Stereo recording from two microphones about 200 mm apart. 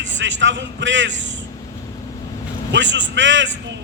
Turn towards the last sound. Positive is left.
turn(degrees=-65)  # may be behind; listen again after turning